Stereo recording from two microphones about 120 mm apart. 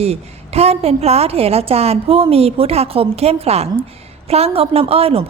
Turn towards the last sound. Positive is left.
turn(degrees=-55)  # may be behind; listen again after turning